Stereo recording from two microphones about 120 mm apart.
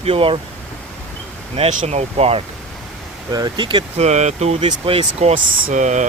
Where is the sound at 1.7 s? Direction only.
80° right; by 2.4 s 55° right (ahead or behind).